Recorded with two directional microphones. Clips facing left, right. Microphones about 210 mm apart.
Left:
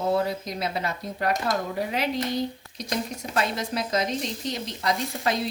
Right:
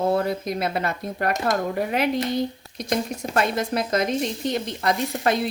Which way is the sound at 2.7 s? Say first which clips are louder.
Right 5 dB; 50° right (ahead or behind).